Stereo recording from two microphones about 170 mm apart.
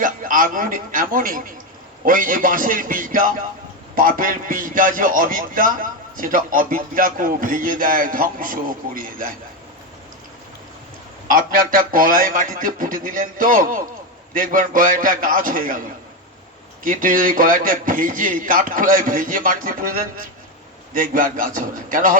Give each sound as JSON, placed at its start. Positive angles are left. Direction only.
{"t": 0.0, "sound": "a man's voice", "side_deg": -55}
{"t": 11.3, "sound": "a man's voice", "side_deg": -55}
{"t": 16.8, "sound": "a man's voice", "side_deg": -55}